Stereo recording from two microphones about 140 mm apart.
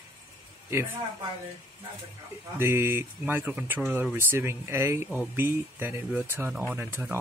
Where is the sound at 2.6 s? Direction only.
15° right (ahead or behind).